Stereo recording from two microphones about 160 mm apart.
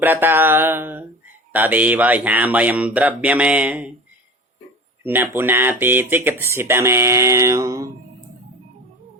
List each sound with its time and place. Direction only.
0.0 s speech: 10° right (ahead or behind)
5.0 s speech: 10° right (ahead or behind)